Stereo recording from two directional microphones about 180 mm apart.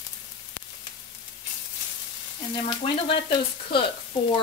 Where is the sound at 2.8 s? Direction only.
30° left (ahead or behind).